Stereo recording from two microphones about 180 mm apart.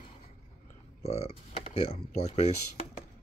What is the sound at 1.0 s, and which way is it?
Speech, 35° left (ahead or behind).